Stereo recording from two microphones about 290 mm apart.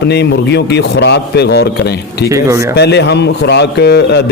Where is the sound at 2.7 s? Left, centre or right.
Left.